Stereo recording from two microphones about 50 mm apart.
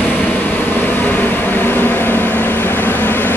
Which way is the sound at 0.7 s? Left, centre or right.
Left.